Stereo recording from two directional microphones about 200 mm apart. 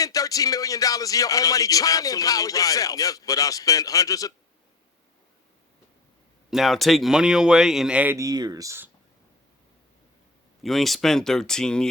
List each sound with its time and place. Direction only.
0.0 s speech: 15° left (ahead or behind)
6.5 s speech: centre (ahead or behind)
10.6 s speech: centre (ahead or behind)